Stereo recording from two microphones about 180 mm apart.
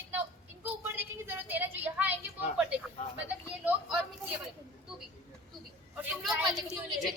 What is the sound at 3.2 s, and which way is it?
Speech, 5° right (ahead or behind).